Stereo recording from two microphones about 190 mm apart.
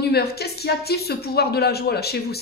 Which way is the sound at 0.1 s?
55° left (ahead or behind).